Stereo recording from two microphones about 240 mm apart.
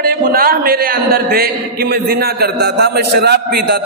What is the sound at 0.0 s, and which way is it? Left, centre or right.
A man's voice, right.